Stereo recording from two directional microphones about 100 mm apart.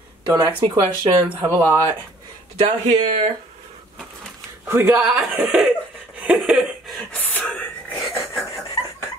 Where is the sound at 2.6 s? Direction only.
90° right.